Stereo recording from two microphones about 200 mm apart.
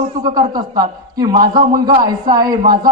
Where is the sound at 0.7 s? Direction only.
20° right (ahead or behind).